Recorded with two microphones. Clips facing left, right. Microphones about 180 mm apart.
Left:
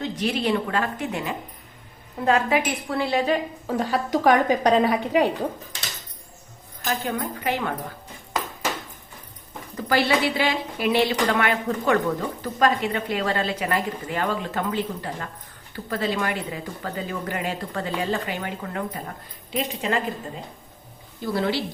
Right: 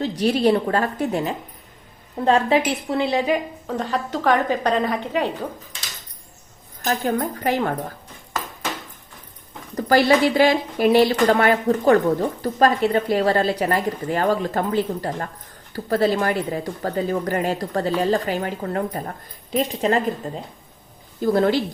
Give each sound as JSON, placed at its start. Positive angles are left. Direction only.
{"t": 0.0, "sound": "a woman's voice", "side_deg": -35}
{"t": 3.8, "sound": "a woman's voice", "side_deg": 10}
{"t": 6.8, "sound": "a woman's voice", "side_deg": -40}
{"t": 9.7, "sound": "a woman's voice", "side_deg": -40}
{"t": 21.2, "sound": "a woman's voice", "side_deg": -45}